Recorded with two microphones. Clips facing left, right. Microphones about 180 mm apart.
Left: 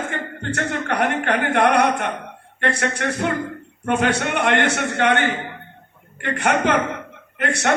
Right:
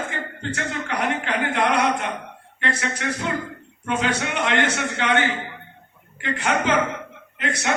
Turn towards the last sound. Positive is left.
turn(degrees=65)  # may be behind; listen again after turning